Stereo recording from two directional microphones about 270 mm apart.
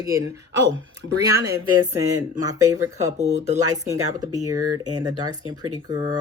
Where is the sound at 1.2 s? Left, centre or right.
Centre.